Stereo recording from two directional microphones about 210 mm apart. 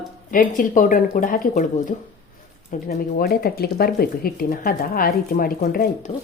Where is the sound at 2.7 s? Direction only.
45° left (ahead or behind).